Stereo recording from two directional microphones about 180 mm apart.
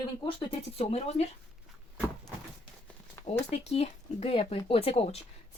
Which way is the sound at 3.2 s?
15° left (ahead or behind).